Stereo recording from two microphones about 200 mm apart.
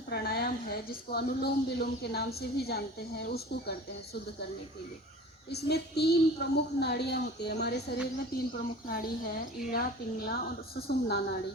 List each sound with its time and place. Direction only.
0.1 s a woman's voice: 50° left (ahead or behind)
5.5 s a woman's voice: 55° left (ahead or behind)